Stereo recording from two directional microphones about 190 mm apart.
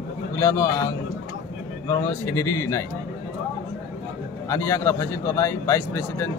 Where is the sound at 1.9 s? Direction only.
15° left (ahead or behind).